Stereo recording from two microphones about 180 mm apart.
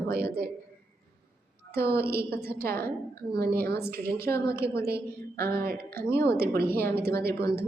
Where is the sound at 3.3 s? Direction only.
60° right (ahead or behind).